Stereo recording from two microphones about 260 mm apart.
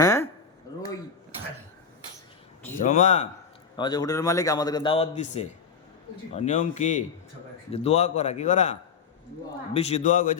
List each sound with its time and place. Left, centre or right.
0.0 s a sound: centre
2.7 s a man's voice: left
3.8 s a man's voice: centre